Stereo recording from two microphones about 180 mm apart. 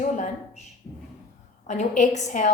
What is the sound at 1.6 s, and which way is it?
Speech, 40° left (ahead or behind).